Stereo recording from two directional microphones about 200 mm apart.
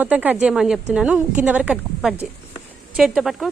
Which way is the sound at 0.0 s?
10° right (ahead or behind).